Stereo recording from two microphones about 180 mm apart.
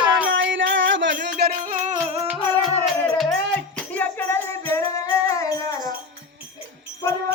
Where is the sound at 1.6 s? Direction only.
45° right (ahead or behind).